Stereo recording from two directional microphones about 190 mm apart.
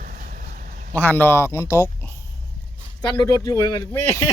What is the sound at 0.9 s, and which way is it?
Speech, 10° left (ahead or behind).